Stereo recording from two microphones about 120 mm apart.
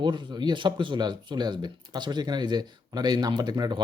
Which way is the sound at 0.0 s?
40° right (ahead or behind).